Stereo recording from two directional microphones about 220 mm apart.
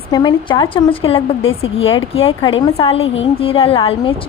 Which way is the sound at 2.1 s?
25° left (ahead or behind).